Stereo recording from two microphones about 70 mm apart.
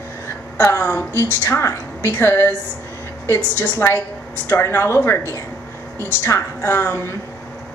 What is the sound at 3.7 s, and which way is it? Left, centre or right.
A woman's voice, left.